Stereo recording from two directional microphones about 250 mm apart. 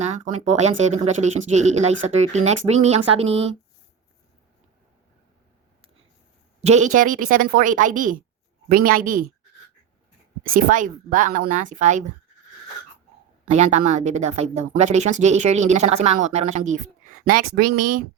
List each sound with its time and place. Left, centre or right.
0.0 s speech: right
6.6 s speech: right
10.4 s speech: right
13.5 s speech: right
17.6 s speech: right